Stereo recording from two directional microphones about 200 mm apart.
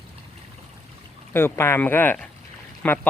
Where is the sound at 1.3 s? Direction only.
10° left (ahead or behind).